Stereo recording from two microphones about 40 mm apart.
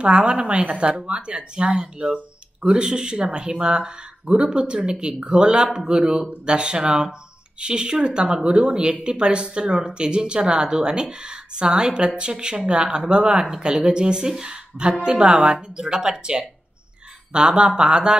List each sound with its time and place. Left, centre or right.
0.0 s speech: right